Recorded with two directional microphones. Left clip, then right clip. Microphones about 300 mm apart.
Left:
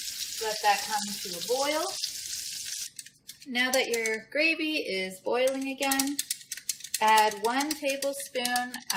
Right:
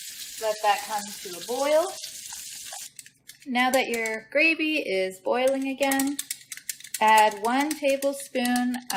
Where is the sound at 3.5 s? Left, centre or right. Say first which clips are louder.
Right 3 dB; right.